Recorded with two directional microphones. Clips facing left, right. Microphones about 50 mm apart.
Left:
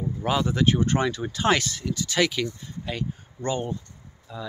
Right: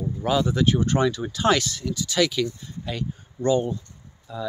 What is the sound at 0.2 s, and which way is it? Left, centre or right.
Speech, left.